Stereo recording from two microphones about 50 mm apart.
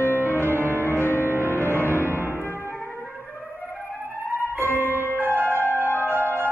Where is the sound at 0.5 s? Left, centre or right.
Right.